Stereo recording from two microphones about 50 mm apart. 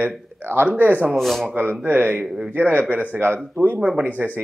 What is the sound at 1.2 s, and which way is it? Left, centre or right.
Speech, centre.